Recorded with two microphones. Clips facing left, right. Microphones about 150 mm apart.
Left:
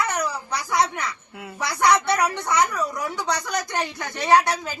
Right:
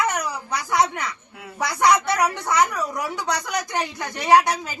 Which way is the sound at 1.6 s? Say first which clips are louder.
Right 1 dB; 15° right (ahead or behind).